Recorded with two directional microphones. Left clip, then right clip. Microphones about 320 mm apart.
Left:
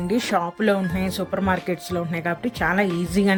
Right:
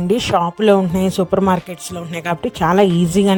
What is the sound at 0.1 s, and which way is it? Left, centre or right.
A woman's voice, right.